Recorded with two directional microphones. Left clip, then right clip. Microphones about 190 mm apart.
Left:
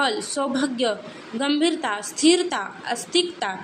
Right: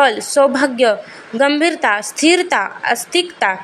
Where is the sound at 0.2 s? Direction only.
25° right (ahead or behind).